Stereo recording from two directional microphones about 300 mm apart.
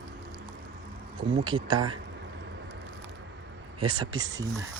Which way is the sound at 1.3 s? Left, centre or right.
Centre.